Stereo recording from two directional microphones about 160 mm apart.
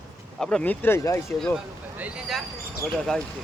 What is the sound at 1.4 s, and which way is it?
Speech, 5° left (ahead or behind).